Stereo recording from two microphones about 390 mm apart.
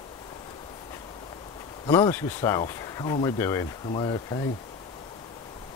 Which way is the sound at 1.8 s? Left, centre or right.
Centre.